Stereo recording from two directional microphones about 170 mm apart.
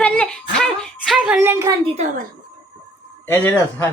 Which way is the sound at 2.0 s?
40° right (ahead or behind).